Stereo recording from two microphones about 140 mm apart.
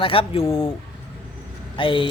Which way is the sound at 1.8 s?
40° left (ahead or behind).